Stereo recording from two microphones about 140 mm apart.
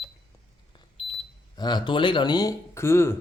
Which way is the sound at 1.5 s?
30° left (ahead or behind).